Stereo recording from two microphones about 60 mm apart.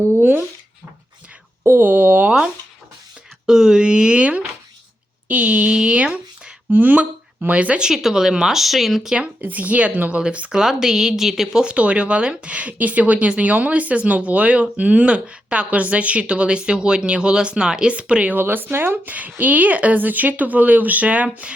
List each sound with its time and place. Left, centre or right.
0.0 s speech: right
1.8 s speech: right
3.4 s speech: centre
7.9 s speech: centre
9.4 s a woman's voice: right; by 11.6 s centre
11.6 s a woman's voice: centre
18.3 s a woman's voice: right